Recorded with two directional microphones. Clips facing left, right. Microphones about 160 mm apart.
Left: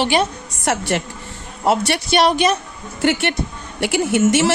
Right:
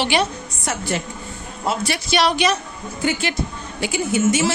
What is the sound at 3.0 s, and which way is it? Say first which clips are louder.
A woman's voice: left 4 dB; 80° left.